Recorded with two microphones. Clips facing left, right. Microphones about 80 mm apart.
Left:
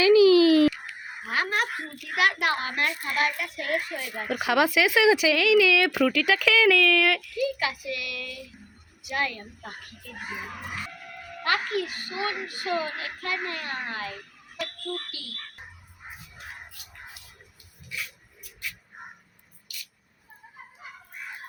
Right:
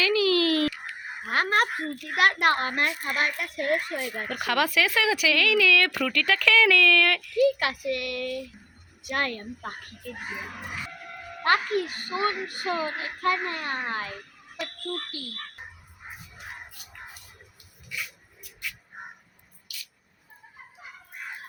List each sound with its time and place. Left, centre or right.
0.0 s a sound: centre
1.3 s a woman's voice: right
4.3 s speech: centre
7.3 s a child's voice: right
11.4 s a child's voice: right